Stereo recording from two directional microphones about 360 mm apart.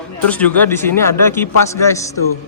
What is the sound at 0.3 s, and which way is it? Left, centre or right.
A man's voice, centre.